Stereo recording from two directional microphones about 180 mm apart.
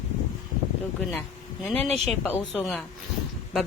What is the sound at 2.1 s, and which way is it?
Speech, 5° left (ahead or behind).